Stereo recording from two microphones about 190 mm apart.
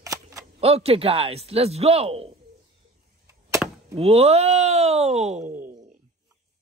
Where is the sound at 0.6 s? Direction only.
30° right (ahead or behind).